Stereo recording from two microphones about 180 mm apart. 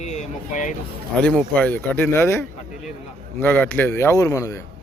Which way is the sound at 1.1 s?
5° left (ahead or behind).